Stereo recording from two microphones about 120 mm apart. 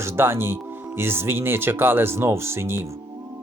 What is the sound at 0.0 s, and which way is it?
Speech, 20° right (ahead or behind).